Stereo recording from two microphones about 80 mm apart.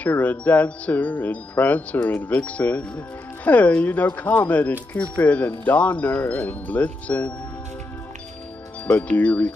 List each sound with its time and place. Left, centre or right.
0.0 s speech: centre
8.8 s speech: centre